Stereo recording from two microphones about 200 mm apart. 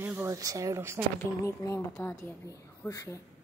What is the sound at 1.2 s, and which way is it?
A woman's voice, 15° left (ahead or behind).